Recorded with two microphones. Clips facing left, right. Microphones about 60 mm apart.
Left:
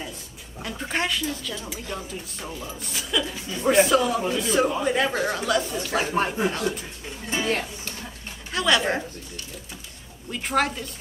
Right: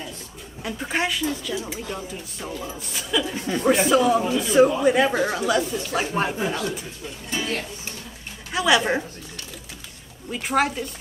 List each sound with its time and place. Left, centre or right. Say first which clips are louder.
0.6 s speech: right 2 dB; centre
3.3 s speech: right 7 dB; right
3.6 s speech: right 1 dB; centre
7.2 s speech: left 3 dB; left
8.5 s a woman's voice: right 2 dB; centre
10.3 s speech: right 2 dB; centre